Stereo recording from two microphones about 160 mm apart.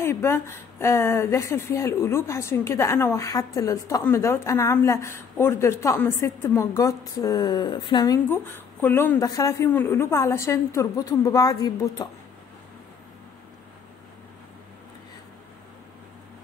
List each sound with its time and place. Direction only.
0.0 s speech: 15° left (ahead or behind)